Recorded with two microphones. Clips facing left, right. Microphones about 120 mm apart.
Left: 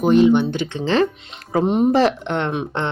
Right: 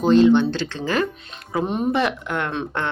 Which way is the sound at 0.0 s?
15° left (ahead or behind).